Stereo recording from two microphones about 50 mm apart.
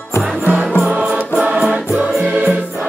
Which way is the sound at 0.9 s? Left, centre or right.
Right.